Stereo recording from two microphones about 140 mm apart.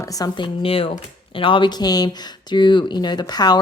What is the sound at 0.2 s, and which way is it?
A woman's voice, 35° left (ahead or behind).